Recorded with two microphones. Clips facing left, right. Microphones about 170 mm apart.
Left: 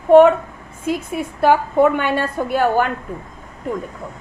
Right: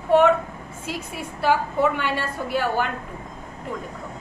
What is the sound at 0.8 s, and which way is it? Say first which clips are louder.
A woman's voice: left 10 dB; 50° left (ahead or behind).